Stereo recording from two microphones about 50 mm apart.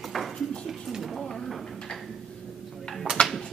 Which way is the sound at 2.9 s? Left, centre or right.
Centre.